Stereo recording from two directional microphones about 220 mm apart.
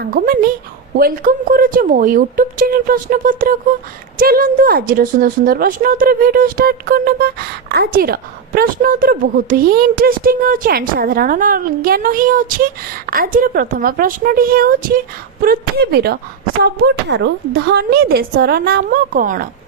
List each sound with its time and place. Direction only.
0.0 s a woman's voice: 45° right (ahead or behind)